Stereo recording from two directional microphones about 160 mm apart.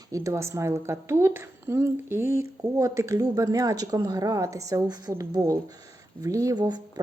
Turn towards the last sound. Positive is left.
turn(degrees=-25)  # may be behind; listen again after turning